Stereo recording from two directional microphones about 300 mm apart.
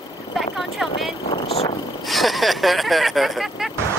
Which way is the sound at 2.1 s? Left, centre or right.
Centre.